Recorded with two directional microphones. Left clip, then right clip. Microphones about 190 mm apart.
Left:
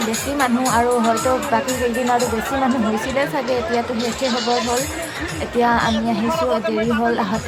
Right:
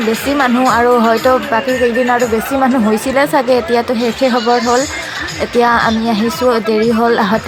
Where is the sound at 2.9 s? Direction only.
35° right (ahead or behind).